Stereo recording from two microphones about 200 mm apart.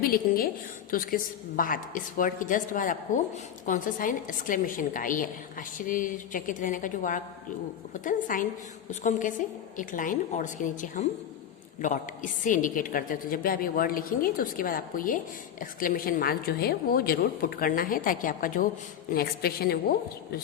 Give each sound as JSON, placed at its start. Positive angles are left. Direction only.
{"t": 0.0, "sound": "a woman's voice", "side_deg": 45}